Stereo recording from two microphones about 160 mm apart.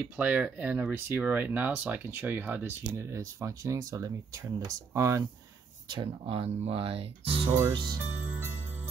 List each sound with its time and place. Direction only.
0.0 s speech: 5° right (ahead or behind)
5.9 s speech: 30° right (ahead or behind)
7.5 s speech: 25° right (ahead or behind)